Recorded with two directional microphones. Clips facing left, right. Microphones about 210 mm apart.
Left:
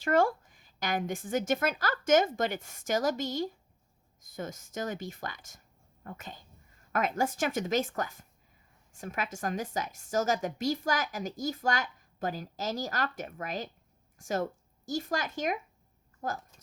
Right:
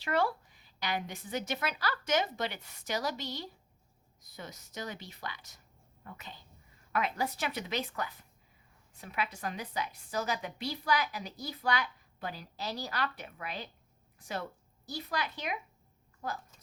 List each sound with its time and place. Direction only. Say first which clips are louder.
0.0 s a woman's voice: left 5 dB; 45° left (ahead or behind)